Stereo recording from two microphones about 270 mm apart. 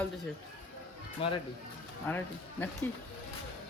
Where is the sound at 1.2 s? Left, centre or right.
Left.